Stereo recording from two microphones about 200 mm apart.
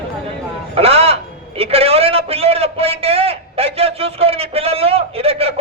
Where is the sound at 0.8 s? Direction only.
30° right (ahead or behind).